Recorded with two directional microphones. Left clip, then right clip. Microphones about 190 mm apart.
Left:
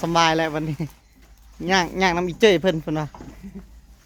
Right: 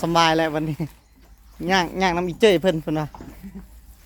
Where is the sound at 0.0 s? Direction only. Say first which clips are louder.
Right 1 dB; 5° right (ahead or behind).